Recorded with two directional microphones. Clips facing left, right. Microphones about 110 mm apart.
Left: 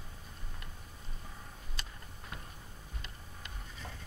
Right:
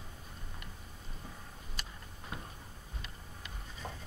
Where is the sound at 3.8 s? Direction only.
25° right (ahead or behind).